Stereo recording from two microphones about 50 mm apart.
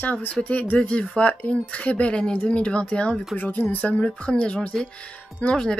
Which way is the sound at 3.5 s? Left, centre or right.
Left.